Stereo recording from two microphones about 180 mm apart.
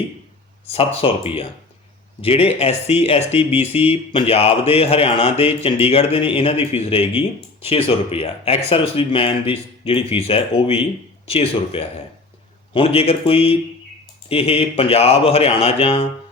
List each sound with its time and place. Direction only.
0.7 s speech: 30° left (ahead or behind)